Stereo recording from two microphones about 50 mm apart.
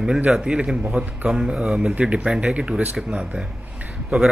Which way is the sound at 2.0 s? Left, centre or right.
Right.